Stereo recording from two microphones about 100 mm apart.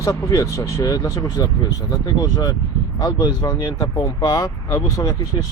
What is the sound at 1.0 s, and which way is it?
Speech, 30° left (ahead or behind).